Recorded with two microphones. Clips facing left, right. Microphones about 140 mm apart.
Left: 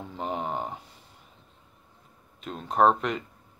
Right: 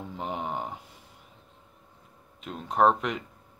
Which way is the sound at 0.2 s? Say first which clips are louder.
Left 2 dB; 10° right (ahead or behind).